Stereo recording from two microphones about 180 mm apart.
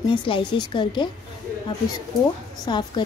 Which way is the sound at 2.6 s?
25° left (ahead or behind).